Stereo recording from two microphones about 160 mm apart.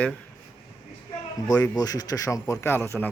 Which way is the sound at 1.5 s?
25° left (ahead or behind).